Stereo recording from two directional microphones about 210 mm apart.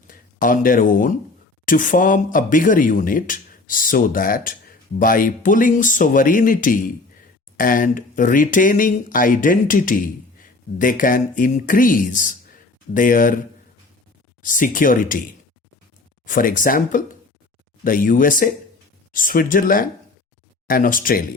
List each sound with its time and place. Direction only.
0.1 s speech: 40° left (ahead or behind)
14.4 s speech: 40° left (ahead or behind)
16.2 s speech: 40° left (ahead or behind)